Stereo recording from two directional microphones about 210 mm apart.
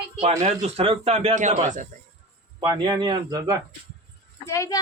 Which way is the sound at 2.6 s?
20° right (ahead or behind).